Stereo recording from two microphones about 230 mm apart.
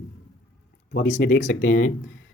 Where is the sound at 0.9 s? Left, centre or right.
Left.